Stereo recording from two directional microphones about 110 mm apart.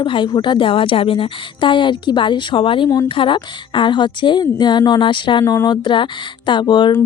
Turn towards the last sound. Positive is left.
turn(degrees=45)  # may be behind; listen again after turning